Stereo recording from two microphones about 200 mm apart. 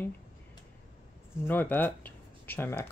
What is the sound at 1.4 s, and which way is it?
Speech, 10° left (ahead or behind).